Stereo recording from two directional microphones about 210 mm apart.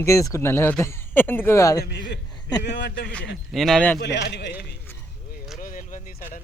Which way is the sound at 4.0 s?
55° left (ahead or behind).